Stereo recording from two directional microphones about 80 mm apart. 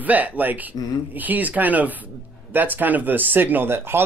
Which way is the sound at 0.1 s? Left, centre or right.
Right.